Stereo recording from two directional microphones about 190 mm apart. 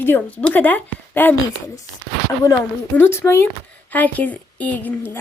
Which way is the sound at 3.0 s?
10° left (ahead or behind).